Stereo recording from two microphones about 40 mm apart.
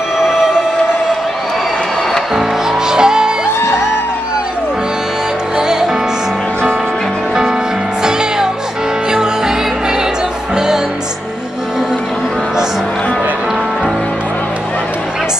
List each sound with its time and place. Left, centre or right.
0.2 s music: centre
2.9 s music: centre
5.6 s music: centre
8.0 s music: centre